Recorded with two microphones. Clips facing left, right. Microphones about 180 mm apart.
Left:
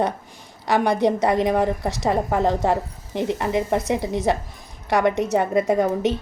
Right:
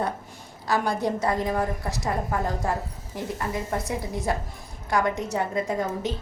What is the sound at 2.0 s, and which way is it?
Speech, 80° left.